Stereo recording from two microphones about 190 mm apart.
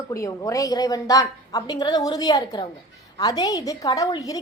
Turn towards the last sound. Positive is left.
turn(degrees=20)  # may be behind; listen again after turning